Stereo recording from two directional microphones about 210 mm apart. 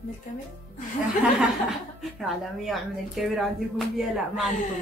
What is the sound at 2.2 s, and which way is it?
A woman's voice, centre (ahead or behind).